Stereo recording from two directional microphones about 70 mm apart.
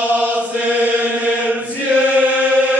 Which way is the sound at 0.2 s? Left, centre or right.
Centre.